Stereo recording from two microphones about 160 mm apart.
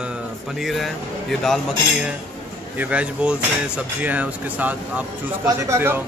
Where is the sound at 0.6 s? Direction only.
Centre (ahead or behind).